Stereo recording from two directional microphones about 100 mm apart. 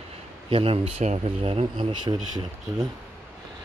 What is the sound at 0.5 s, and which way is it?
Speech, 70° right (ahead or behind).